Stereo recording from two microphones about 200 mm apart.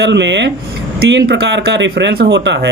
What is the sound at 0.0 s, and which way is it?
Speech, 60° right (ahead or behind).